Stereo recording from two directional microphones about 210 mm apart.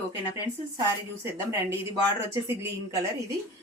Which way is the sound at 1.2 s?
15° right (ahead or behind).